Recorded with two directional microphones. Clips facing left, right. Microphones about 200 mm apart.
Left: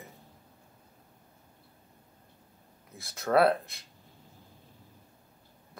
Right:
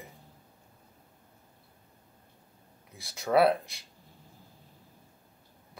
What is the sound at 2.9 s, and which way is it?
Speech, centre (ahead or behind).